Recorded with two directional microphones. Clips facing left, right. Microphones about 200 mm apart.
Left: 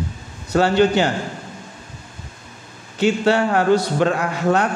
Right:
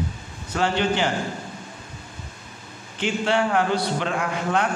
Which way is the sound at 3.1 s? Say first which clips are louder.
Left 5 dB; 40° left (ahead or behind).